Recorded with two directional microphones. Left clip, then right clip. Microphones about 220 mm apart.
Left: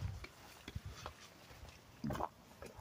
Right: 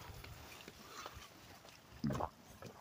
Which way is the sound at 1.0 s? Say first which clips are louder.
Left 5 dB; 10° right (ahead or behind).